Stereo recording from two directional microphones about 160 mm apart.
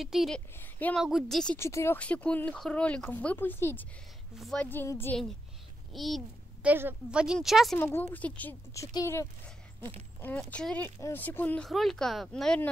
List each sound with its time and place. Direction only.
0.0 s speech: centre (ahead or behind)
0.6 s a woman's voice: 10° left (ahead or behind)
1.0 s speech: centre (ahead or behind)
1.6 s speech: 15° left (ahead or behind)
5.9 s a child's voice: centre (ahead or behind)
6.7 s a woman's voice: 10° right (ahead or behind)
7.7 s speech: 10° left (ahead or behind)